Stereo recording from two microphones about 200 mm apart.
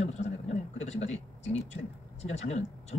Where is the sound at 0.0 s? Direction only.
35° left (ahead or behind).